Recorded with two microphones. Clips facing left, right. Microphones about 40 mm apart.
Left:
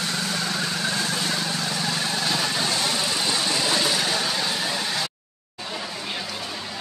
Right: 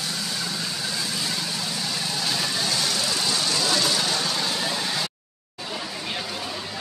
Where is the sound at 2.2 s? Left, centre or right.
Centre.